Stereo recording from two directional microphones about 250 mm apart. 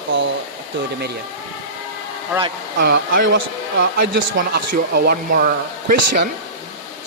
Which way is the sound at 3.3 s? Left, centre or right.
Right.